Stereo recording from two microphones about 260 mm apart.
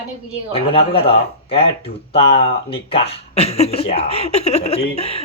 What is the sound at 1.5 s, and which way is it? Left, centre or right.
Speech, left.